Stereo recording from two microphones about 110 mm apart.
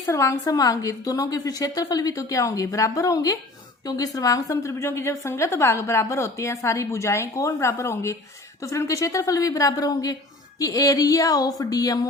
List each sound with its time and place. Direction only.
0.0 s a woman's voice: 30° left (ahead or behind)